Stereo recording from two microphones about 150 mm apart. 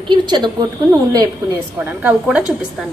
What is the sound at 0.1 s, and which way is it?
Speech, 30° right (ahead or behind).